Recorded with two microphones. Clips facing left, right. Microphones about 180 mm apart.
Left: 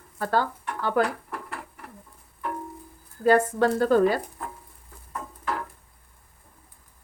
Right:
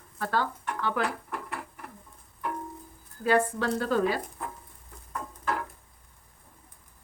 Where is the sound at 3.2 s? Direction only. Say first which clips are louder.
Left 5 dB; 45° left (ahead or behind).